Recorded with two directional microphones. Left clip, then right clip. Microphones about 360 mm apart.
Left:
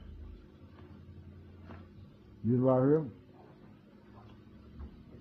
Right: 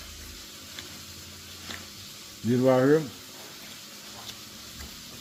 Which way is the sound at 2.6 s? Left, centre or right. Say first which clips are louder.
Right 6 dB; right.